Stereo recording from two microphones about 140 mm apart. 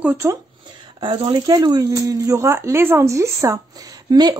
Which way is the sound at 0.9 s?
35° right (ahead or behind).